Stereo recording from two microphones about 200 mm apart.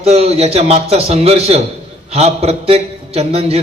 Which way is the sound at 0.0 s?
30° right (ahead or behind).